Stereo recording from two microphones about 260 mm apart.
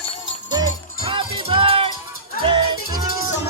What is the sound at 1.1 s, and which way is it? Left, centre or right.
Music, centre.